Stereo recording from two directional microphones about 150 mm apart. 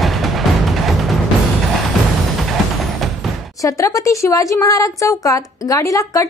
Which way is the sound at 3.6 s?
20° left (ahead or behind).